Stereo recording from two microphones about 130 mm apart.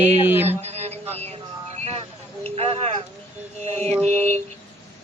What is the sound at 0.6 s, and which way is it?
Mantra, 55° right (ahead or behind).